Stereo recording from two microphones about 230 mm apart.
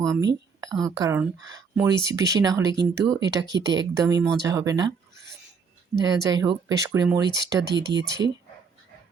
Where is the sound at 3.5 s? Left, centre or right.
Right.